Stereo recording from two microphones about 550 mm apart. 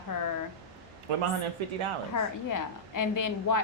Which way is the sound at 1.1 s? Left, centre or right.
Right.